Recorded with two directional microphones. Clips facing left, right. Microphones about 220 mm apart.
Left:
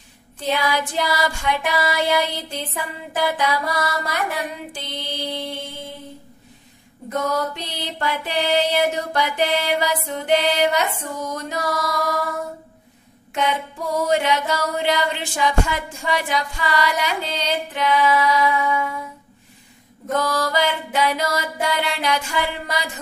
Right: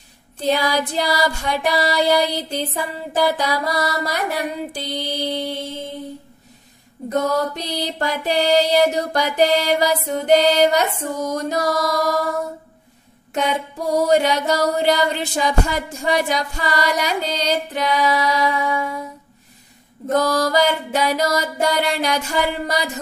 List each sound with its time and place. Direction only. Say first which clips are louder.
0.5 s music: right 3 dB; 35° right (ahead or behind)
7.1 s music: right 3 dB; 40° right (ahead or behind)
13.3 s music: right 2 dB; 40° right (ahead or behind)
20.1 s music: right 4 dB; 40° right (ahead or behind)